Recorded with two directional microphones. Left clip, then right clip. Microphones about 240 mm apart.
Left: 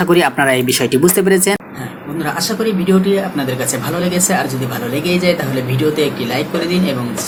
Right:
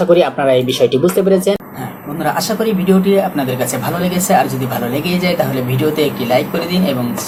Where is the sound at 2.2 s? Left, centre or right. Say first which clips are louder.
Right 2 dB; centre.